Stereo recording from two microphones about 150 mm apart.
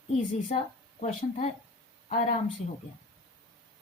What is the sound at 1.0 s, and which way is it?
Speech, 50° left (ahead or behind).